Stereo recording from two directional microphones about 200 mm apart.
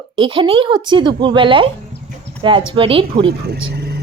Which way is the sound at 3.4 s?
55° right (ahead or behind).